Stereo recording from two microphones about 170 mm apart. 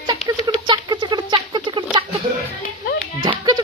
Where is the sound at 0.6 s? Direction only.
25° right (ahead or behind).